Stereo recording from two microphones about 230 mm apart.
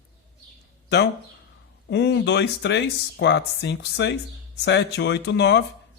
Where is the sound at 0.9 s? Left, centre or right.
Left.